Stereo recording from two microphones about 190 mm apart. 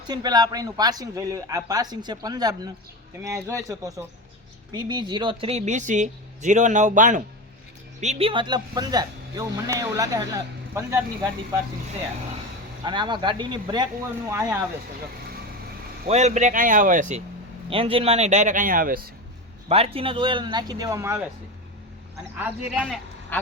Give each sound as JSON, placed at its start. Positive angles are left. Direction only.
{"t": 0.1, "sound": "speech", "side_deg": -20}
{"t": 12.8, "sound": "speech", "side_deg": -25}
{"t": 16.0, "sound": "speech", "side_deg": -35}
{"t": 17.7, "sound": "speech", "side_deg": -30}
{"t": 19.6, "sound": "speech", "side_deg": -30}
{"t": 22.4, "sound": "speech", "side_deg": -10}